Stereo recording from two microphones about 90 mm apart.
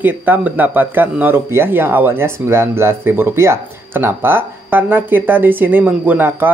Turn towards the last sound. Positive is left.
turn(degrees=-20)  # may be behind; listen again after turning